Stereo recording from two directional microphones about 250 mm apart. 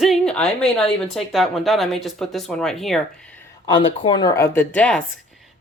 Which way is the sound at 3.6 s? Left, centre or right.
Centre.